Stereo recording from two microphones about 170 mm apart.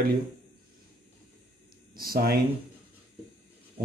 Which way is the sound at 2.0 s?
60° right (ahead or behind).